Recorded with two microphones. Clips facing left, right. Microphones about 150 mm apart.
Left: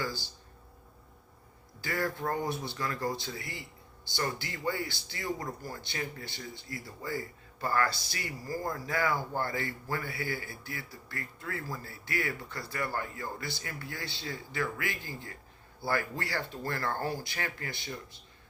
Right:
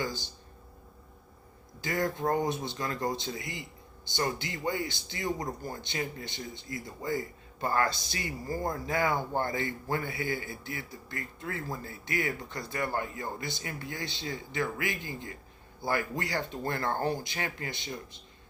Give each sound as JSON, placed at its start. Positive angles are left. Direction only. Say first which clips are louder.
{"t": 0.0, "sound": "speech", "louder": "right 2 dB", "side_deg": -20}
{"t": 1.8, "sound": "speech", "louder": "right 3 dB", "side_deg": -20}